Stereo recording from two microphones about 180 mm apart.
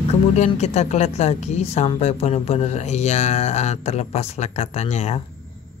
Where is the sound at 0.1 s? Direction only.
35° left (ahead or behind).